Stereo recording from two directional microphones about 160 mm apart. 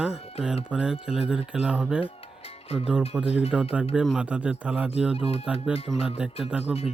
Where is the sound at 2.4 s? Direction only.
40° left (ahead or behind).